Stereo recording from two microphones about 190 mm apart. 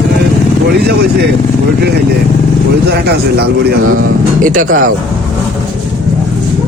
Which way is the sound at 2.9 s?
60° right (ahead or behind).